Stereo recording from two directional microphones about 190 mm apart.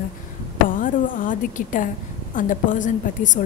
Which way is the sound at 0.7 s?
45° left (ahead or behind).